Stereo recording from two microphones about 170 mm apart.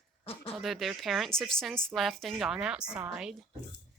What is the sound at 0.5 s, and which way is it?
A woman's voice, centre (ahead or behind).